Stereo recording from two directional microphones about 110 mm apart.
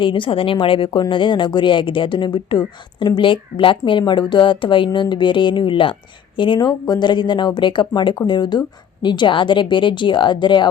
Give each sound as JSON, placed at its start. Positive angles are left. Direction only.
{"t": 0.0, "sound": "a woman's voice", "side_deg": 50}